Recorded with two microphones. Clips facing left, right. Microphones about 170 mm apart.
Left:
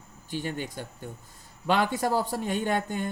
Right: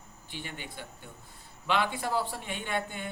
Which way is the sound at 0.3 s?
45° left (ahead or behind).